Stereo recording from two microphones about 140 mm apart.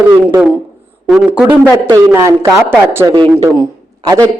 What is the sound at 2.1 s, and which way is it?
Speech, 20° right (ahead or behind).